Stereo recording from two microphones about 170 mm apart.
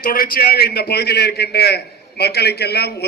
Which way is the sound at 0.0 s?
55° left (ahead or behind).